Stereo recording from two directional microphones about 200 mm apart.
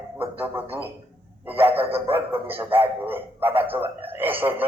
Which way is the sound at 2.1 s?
10° right (ahead or behind).